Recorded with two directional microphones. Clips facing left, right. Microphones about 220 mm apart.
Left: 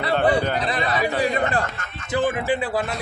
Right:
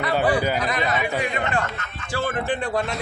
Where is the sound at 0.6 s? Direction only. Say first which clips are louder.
Left 1 dB; 30° left (ahead or behind).